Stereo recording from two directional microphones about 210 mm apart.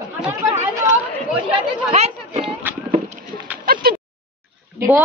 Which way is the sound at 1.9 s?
30° right (ahead or behind).